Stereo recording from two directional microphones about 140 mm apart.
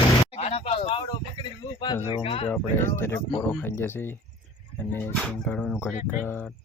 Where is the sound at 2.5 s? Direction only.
15° left (ahead or behind).